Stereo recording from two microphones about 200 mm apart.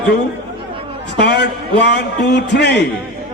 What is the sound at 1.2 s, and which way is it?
A man's voice, 55° left (ahead or behind).